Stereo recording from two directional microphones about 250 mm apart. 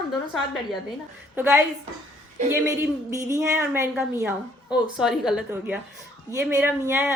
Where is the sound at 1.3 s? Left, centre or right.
Centre.